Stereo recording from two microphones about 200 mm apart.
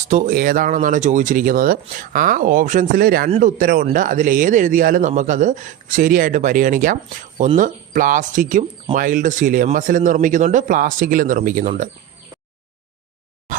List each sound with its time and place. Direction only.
0.1 s speech: 40° right (ahead or behind)